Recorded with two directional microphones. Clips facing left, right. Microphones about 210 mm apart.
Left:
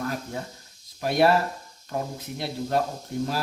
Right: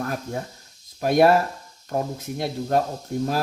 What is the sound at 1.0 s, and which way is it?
Speech, 50° right (ahead or behind).